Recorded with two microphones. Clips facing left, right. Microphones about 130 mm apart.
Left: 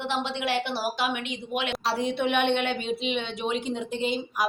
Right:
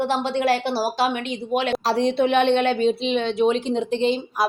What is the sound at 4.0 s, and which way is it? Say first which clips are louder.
Speech: right 4 dB; 30° right (ahead or behind).